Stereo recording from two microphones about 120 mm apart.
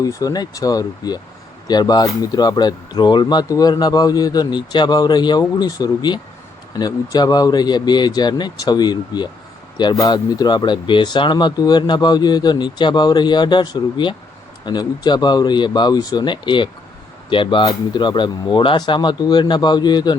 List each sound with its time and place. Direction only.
0.0 s speech: 30° left (ahead or behind)